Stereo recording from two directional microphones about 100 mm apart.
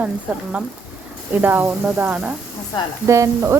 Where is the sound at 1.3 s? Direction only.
20° right (ahead or behind).